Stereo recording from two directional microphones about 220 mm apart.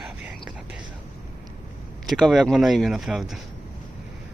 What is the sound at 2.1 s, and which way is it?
Speech, centre (ahead or behind).